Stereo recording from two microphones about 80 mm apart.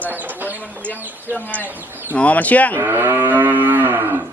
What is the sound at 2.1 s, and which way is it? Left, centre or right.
Speech, centre.